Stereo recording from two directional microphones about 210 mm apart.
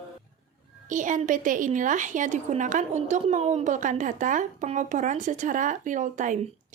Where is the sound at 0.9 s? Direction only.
35° right (ahead or behind).